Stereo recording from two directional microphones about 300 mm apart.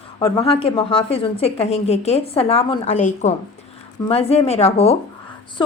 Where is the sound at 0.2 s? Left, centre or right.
Centre.